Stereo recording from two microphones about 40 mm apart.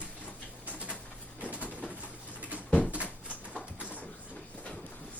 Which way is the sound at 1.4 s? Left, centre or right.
Right.